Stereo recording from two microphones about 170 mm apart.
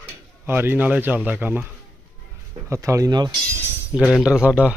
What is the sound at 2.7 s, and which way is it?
Speech, 15° right (ahead or behind).